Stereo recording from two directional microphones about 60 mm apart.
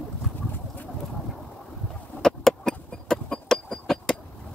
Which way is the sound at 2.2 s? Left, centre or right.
Centre.